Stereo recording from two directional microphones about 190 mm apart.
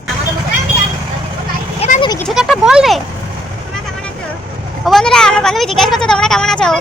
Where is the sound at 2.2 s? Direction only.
Centre (ahead or behind).